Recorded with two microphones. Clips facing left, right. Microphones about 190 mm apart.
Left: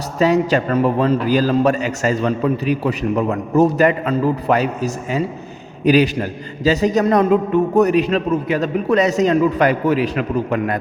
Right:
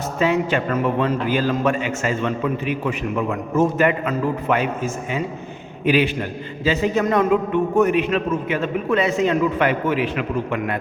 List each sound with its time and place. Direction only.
0.2 s a man's voice: 40° left (ahead or behind)